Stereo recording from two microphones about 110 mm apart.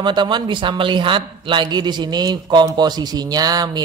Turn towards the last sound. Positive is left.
turn(degrees=-40)  # may be behind; listen again after turning